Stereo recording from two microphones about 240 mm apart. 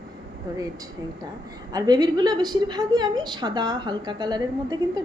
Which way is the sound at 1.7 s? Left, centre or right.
Centre.